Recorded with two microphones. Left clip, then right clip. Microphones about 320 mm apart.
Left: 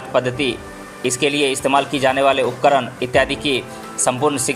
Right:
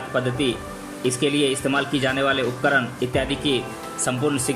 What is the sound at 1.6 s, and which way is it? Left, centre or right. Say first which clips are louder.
Speech: left 6 dB; left.